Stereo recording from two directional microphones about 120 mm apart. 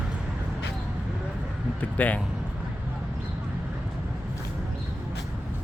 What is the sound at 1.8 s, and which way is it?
Speech, 15° left (ahead or behind).